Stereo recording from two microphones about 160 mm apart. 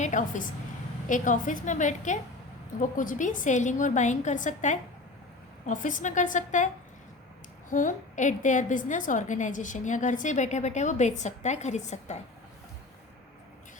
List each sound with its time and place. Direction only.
0.0 s a woman's voice: 50° left (ahead or behind)
7.7 s a woman's voice: 55° left (ahead or behind)